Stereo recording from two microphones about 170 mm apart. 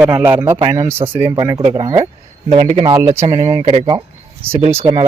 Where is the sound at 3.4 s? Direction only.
20° right (ahead or behind).